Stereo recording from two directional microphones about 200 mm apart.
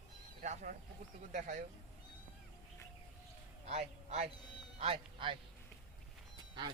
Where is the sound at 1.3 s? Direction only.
40° right (ahead or behind).